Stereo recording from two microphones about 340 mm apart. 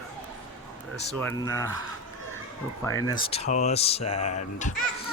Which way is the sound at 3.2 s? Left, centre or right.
Centre.